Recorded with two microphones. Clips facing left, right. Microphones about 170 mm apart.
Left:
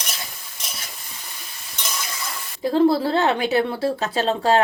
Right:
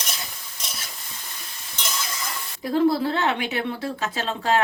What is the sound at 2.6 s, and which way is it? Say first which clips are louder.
Speech: left 3 dB; 30° left (ahead or behind).